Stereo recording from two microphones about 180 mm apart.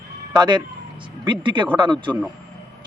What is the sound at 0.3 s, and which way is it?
Speech, 25° right (ahead or behind).